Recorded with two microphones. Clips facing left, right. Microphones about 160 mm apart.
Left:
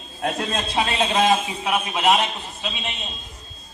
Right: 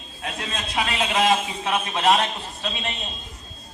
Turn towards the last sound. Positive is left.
turn(degrees=5)  # may be behind; listen again after turning